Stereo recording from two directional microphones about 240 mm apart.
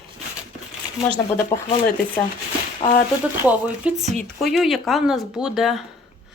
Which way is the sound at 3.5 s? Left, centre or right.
Centre.